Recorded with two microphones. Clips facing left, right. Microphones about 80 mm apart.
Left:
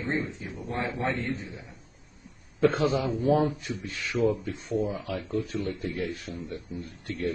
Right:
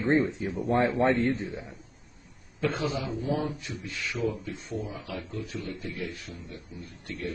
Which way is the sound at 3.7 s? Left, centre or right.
Centre.